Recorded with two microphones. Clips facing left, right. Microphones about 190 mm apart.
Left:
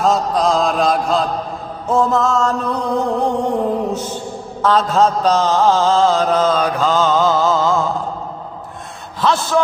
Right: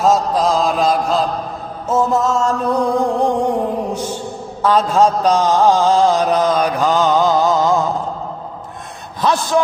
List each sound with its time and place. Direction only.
0.0 s mantra: centre (ahead or behind)
4.6 s mantra: 10° right (ahead or behind)
9.2 s mantra: 15° right (ahead or behind)